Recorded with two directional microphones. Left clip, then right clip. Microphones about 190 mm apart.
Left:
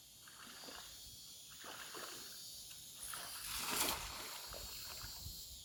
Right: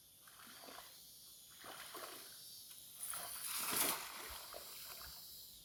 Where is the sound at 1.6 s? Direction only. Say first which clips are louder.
Left 1 dB; 20° right (ahead or behind).